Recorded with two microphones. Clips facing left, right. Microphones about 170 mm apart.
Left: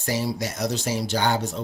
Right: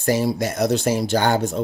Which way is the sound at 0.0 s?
50° right (ahead or behind).